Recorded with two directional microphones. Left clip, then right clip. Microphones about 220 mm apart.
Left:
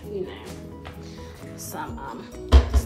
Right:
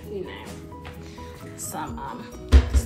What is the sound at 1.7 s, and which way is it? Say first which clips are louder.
Music: right 1 dB; 5° left (ahead or behind).